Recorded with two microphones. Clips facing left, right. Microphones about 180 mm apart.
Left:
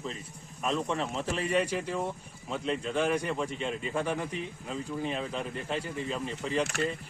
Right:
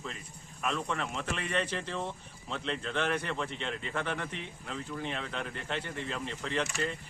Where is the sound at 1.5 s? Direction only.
10° left (ahead or behind).